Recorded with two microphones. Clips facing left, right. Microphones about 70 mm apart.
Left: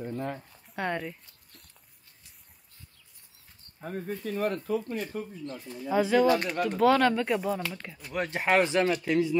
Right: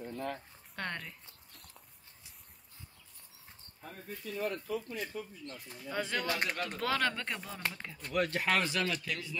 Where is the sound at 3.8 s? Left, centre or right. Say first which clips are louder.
Left 10 dB; left.